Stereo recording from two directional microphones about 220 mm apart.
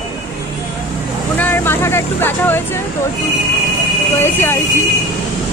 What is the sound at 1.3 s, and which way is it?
Vehicle, 10° left (ahead or behind).